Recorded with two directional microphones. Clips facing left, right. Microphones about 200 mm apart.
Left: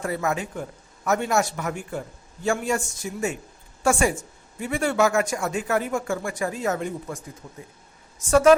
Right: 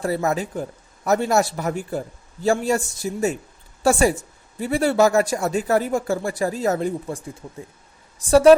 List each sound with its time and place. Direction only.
0.0 s a woman's voice: 35° right (ahead or behind)
7.4 s speech: 20° right (ahead or behind)
8.3 s a woman's voice: 35° right (ahead or behind)